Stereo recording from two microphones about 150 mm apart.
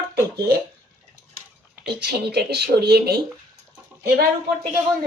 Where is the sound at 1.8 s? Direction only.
90° right.